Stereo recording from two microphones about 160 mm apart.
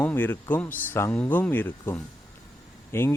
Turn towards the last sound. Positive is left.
turn(degrees=15)  # may be behind; listen again after turning